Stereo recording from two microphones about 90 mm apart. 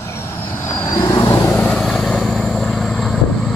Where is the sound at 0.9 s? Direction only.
40° left (ahead or behind).